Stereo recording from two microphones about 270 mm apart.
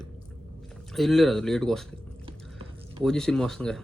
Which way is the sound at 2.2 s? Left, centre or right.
Centre.